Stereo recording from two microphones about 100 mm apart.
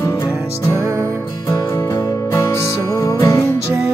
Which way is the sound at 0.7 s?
30° right (ahead or behind).